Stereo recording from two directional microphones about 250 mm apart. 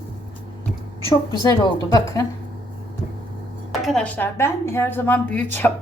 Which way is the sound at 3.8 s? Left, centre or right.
Centre.